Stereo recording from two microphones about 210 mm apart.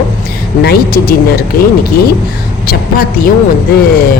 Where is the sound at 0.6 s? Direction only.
45° left (ahead or behind).